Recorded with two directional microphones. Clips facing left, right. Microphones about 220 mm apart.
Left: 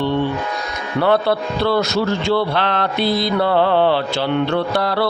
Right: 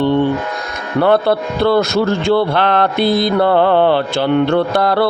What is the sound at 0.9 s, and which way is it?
Speech, 50° right (ahead or behind).